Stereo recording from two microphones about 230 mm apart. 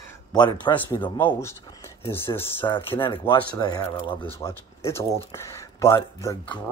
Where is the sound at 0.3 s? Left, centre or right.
Centre.